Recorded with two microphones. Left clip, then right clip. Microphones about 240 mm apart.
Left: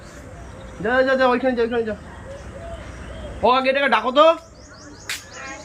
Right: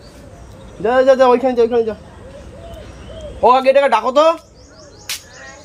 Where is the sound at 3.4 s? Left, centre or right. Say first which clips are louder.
Right 6 dB; centre.